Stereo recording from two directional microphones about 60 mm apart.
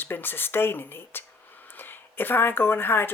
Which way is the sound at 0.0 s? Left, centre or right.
Left.